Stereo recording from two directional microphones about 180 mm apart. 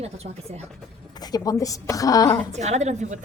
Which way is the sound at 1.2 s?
20° left (ahead or behind).